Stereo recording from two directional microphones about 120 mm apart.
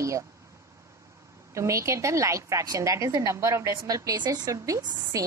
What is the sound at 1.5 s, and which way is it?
A woman's voice, 25° right (ahead or behind).